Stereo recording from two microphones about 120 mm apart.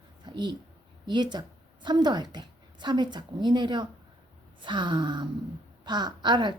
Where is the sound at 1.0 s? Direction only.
40° right (ahead or behind).